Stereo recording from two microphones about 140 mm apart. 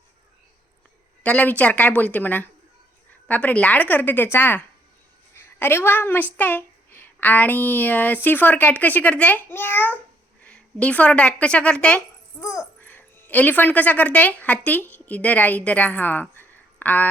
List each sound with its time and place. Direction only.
1.2 s a woman's voice: 10° left (ahead or behind)
12.4 s a child's voice: 20° left (ahead or behind)